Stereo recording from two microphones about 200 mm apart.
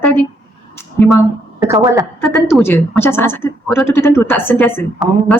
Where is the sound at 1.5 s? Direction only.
15° right (ahead or behind).